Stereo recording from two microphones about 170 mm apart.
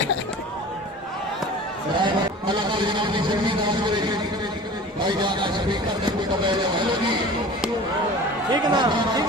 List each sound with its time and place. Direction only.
2.0 s a sound: 25° right (ahead or behind)
5.0 s a man's voice: 25° right (ahead or behind)
8.6 s a man's voice: 25° right (ahead or behind)